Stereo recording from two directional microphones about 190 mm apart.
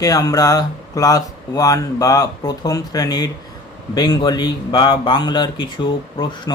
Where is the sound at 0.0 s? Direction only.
20° left (ahead or behind).